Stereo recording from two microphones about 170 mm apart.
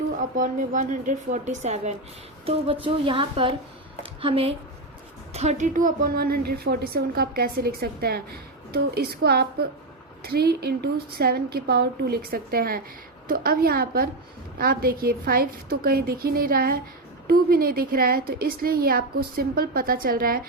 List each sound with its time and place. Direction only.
0.2 s a woman's voice: 50° right (ahead or behind)